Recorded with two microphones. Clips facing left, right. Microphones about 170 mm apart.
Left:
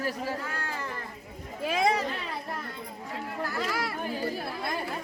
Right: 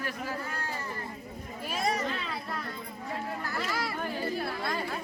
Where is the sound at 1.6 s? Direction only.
90° left.